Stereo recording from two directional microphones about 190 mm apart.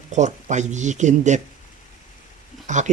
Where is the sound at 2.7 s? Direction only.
40° right (ahead or behind).